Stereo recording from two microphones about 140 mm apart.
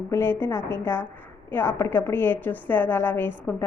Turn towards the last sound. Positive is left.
turn(degrees=15)  # may be behind; listen again after turning